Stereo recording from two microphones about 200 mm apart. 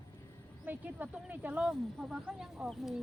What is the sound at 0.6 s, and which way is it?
Speech, 10° right (ahead or behind).